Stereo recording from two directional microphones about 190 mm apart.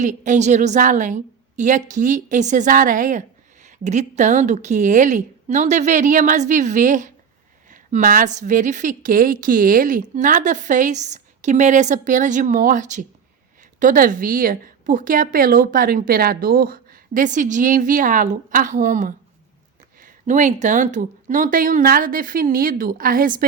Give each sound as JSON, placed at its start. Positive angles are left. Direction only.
{"t": 0.0, "sound": "a woman's voice", "side_deg": -40}